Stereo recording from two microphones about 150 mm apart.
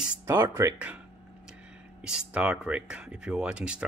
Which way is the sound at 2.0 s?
5° right (ahead or behind).